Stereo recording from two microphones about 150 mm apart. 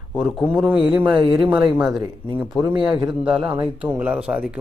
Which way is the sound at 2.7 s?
30° right (ahead or behind).